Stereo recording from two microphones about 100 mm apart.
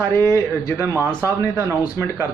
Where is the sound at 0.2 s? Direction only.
30° left (ahead or behind).